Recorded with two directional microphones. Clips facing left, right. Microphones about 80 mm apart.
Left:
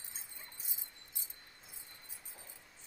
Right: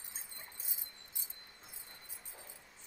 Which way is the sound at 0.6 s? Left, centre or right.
Centre.